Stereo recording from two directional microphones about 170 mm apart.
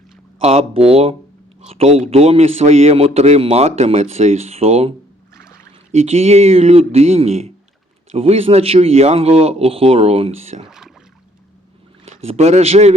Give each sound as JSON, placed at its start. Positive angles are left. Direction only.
{"t": 0.3, "sound": "a man's voice", "side_deg": -35}
{"t": 10.7, "sound": "rowboat", "side_deg": -5}
{"t": 12.0, "sound": "speech", "side_deg": -40}